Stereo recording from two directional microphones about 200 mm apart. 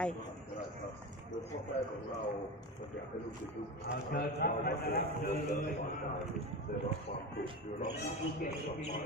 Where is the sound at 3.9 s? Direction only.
50° left (ahead or behind).